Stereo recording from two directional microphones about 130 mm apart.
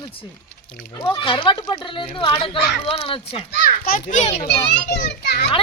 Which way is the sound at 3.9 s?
75° left (ahead or behind).